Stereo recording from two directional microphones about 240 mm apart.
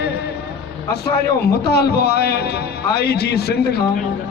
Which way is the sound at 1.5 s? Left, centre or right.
Left.